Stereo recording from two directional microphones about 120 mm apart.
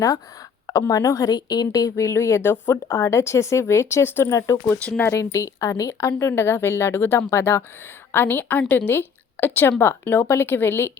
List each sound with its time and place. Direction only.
0.7 s a woman's voice: 30° left (ahead or behind)